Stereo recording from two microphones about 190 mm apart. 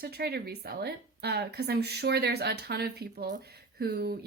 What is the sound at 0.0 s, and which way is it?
A woman's voice, 55° right (ahead or behind).